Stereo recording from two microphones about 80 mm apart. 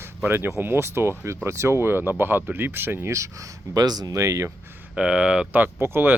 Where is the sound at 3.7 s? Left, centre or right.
Right.